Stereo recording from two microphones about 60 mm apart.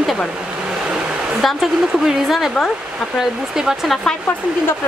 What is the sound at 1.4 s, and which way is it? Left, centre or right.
Speech, centre.